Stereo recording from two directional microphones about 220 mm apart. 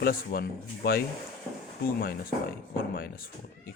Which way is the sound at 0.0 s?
40° left (ahead or behind).